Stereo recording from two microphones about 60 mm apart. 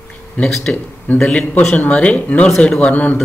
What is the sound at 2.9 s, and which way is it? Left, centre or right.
Speech, left.